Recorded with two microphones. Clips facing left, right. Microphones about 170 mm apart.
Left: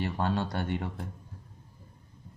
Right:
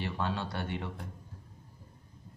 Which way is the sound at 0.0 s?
45° left (ahead or behind).